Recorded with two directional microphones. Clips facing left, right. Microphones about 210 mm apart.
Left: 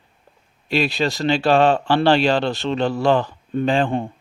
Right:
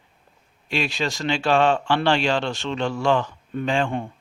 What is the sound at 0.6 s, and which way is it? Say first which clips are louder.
Speech: left 5 dB; 35° left (ahead or behind).